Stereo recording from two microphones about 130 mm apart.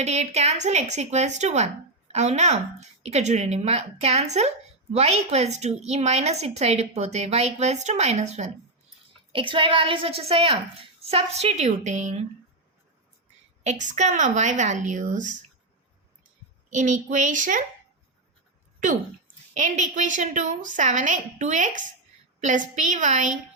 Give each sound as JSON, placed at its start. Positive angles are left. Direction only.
{"t": 0.0, "sound": "speech", "side_deg": -60}
{"t": 9.3, "sound": "a woman's voice", "side_deg": -40}
{"t": 13.7, "sound": "a woman's voice", "side_deg": -65}
{"t": 16.7, "sound": "a woman's voice", "side_deg": -70}
{"t": 19.5, "sound": "a woman's voice", "side_deg": -70}